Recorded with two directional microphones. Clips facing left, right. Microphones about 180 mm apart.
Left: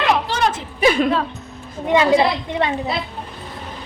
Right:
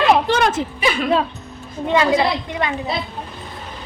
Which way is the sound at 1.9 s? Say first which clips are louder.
Left 2 dB; 25° left (ahead or behind).